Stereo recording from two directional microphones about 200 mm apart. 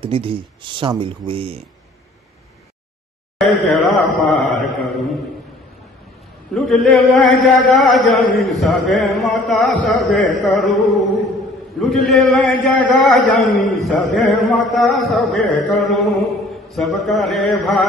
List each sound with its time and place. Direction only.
0.0 s speech: 25° right (ahead or behind)
3.3 s a man's voice: centre (ahead or behind)
4.2 s mantra: centre (ahead or behind)
6.5 s a man's voice: centre (ahead or behind)
10.4 s chant: centre (ahead or behind)
12.6 s a man's voice: 5° left (ahead or behind)